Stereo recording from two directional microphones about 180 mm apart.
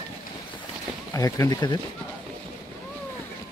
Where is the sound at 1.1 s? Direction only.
20° left (ahead or behind).